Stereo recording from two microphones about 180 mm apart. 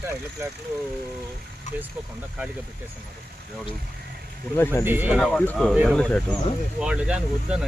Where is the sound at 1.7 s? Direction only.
40° left (ahead or behind).